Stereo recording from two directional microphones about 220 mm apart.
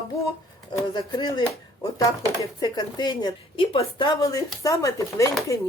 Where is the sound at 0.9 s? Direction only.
20° left (ahead or behind).